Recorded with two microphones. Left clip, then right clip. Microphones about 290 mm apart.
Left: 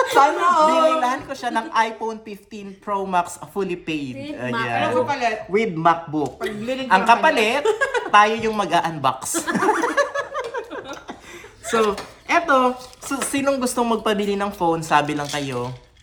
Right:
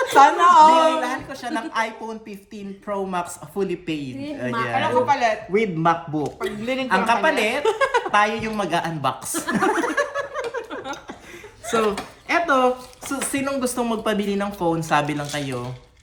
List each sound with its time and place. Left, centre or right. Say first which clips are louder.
0.2 s singing: right 4 dB; right
1.0 s speech: left 4 dB; centre
4.8 s a woman's voice: right 2 dB; right
5.5 s speech: left 2 dB; centre
7.6 s speech: even; right
8.1 s speech: left 4 dB; centre
11.7 s speech: left 2 dB; centre